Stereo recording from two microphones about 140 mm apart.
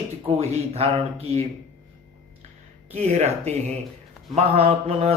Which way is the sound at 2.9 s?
55° right (ahead or behind).